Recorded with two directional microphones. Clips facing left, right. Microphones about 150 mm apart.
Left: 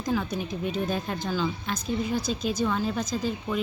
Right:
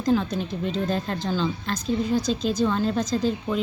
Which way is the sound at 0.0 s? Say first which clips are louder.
Right 5 dB; 10° left (ahead or behind).